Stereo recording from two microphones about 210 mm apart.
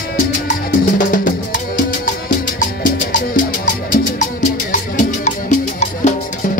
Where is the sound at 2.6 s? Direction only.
40° left (ahead or behind).